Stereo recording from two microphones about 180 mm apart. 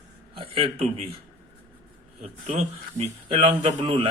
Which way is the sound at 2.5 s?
35° right (ahead or behind).